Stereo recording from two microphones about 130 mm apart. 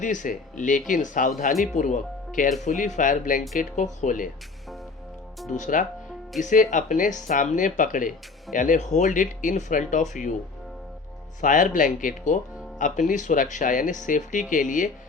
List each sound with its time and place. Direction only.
0.0 s speech: 75° left (ahead or behind)
2.6 s speech: 75° left (ahead or behind)
5.5 s speech: 75° left (ahead or behind)
11.3 s speech: 80° left